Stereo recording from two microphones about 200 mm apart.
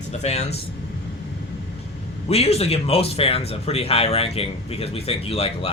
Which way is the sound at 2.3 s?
30° left (ahead or behind).